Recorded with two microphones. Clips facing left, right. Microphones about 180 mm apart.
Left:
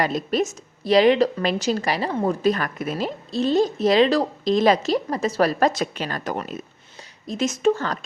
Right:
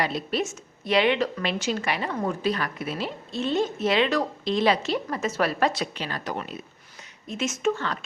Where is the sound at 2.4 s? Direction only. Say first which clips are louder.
Left 5 dB; 45° left (ahead or behind).